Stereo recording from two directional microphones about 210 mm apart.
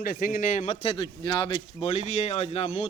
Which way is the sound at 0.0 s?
45° left (ahead or behind).